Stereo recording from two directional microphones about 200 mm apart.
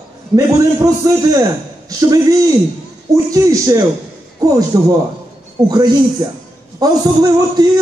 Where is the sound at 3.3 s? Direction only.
15° right (ahead or behind).